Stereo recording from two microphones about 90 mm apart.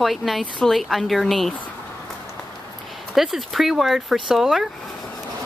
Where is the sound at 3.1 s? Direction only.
Centre (ahead or behind).